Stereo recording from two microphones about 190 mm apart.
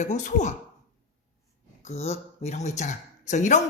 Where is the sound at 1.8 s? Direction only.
35° left (ahead or behind).